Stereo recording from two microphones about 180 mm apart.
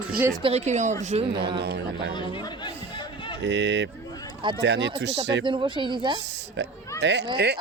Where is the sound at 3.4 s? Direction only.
80° right.